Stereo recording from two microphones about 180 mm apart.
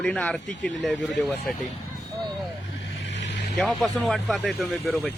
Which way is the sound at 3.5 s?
Centre (ahead or behind).